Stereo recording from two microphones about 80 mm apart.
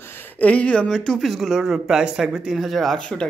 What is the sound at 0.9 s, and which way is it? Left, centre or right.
Speech, centre.